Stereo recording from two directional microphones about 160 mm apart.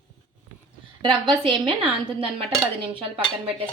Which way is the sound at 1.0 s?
30° right (ahead or behind).